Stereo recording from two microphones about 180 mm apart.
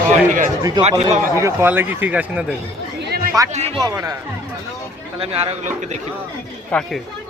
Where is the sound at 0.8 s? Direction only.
35° right (ahead or behind).